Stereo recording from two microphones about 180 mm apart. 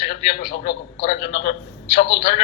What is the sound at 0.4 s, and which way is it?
A man's voice, 70° left (ahead or behind).